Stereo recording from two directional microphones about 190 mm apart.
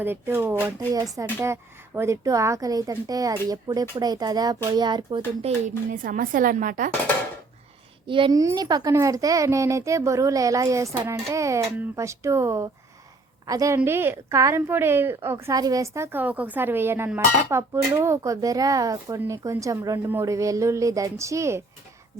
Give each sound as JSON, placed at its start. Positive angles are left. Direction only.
{"t": 0.0, "sound": "a woman's voice", "side_deg": -10}
{"t": 5.6, "sound": "speech", "side_deg": -45}
{"t": 8.0, "sound": "a woman's voice", "side_deg": -25}